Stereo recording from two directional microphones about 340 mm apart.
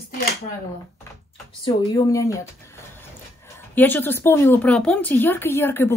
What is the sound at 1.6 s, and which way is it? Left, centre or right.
Speech, centre.